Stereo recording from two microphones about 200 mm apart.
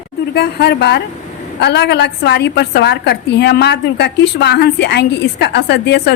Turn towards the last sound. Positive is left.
turn(degrees=55)  # may be behind; listen again after turning